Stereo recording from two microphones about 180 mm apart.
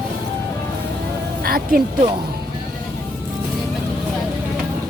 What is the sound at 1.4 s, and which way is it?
Speech, 55° right (ahead or behind).